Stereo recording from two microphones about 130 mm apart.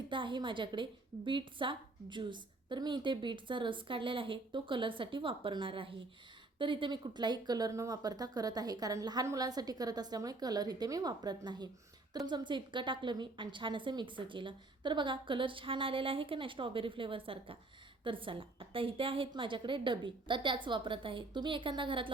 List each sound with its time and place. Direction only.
0.1 s a woman's voice: 40° right (ahead or behind)